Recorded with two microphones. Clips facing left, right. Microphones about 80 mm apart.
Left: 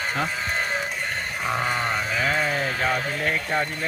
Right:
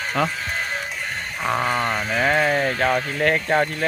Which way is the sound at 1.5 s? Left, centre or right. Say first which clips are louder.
Right 4 dB; right.